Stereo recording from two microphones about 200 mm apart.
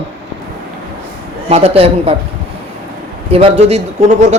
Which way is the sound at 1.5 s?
30° right (ahead or behind).